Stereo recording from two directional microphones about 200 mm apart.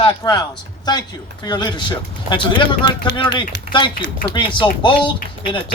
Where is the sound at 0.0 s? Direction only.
20° left (ahead or behind).